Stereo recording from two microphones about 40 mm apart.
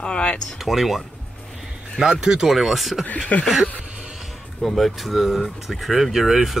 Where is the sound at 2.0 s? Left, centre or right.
Centre.